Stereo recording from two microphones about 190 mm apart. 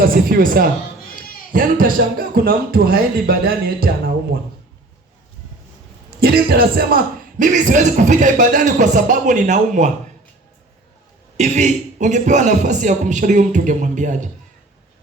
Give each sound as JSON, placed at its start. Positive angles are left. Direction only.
{"t": 0.0, "sound": "speech", "side_deg": -50}
{"t": 6.1, "sound": "a man's voice", "side_deg": -50}
{"t": 11.3, "sound": "a man's voice", "side_deg": -40}